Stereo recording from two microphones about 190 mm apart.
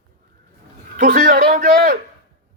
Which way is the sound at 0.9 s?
45° right (ahead or behind).